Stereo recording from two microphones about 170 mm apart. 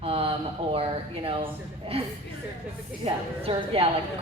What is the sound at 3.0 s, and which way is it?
Speech, 35° right (ahead or behind).